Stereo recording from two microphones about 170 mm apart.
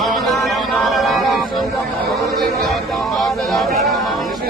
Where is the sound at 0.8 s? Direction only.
Centre (ahead or behind).